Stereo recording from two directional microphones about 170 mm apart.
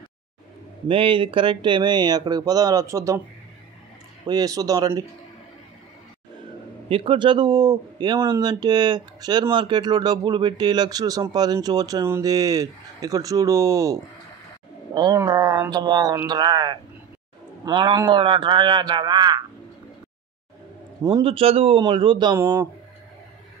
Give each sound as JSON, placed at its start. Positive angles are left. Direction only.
{"t": 0.8, "sound": "speech", "side_deg": -30}
{"t": 4.3, "sound": "speech", "side_deg": -20}
{"t": 6.9, "sound": "speech", "side_deg": -30}
{"t": 15.0, "sound": "speech", "side_deg": -20}
{"t": 21.2, "sound": "speech", "side_deg": -35}